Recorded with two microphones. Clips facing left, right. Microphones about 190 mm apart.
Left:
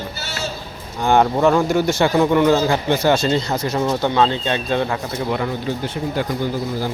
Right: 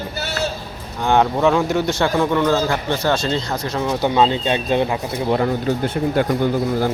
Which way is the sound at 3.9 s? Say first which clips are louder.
Right 2 dB; 15° right (ahead or behind).